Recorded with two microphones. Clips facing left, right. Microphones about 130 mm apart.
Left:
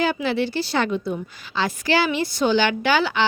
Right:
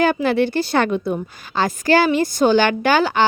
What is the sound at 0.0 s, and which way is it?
A woman's voice, 55° right (ahead or behind).